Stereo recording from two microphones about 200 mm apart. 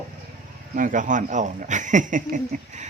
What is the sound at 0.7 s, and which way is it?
Speech, 40° right (ahead or behind).